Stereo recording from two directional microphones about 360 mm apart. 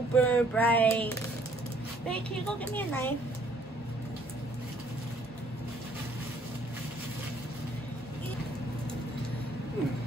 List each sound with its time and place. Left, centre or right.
0.1 s a child's voice: centre